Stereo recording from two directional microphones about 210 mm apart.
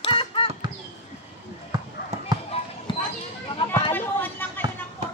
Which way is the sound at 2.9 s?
25° left (ahead or behind).